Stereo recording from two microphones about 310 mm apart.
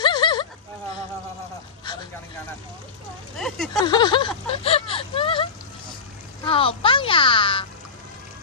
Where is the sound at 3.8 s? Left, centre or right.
Centre.